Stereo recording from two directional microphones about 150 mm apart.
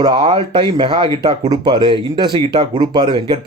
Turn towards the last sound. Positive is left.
turn(degrees=-30)  # may be behind; listen again after turning